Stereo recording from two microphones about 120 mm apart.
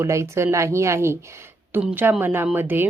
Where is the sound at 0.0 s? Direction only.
25° right (ahead or behind).